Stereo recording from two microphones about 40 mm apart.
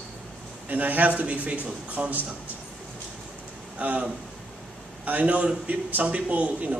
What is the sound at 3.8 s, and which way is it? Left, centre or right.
Speech, right.